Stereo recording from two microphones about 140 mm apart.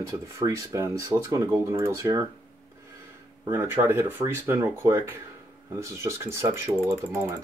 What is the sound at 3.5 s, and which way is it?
Speech, 20° right (ahead or behind).